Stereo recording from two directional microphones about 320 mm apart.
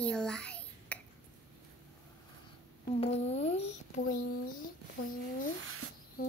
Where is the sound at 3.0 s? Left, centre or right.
Centre.